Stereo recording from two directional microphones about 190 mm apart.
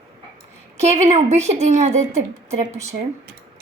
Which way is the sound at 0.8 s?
35° right (ahead or behind).